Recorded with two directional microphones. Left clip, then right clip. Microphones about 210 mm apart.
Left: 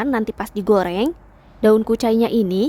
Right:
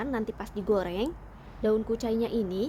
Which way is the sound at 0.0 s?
30° left (ahead or behind).